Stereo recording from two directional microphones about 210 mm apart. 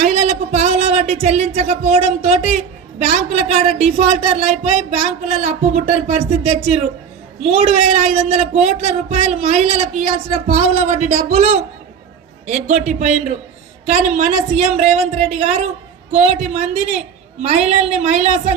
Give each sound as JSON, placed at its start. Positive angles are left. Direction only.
{"t": 0.0, "sound": "speech", "side_deg": -30}